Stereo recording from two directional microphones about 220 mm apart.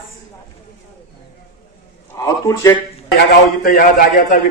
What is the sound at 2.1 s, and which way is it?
Speech, 15° left (ahead or behind).